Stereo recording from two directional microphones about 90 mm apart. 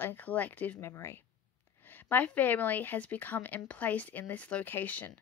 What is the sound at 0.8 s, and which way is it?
Speech, 30° left (ahead or behind).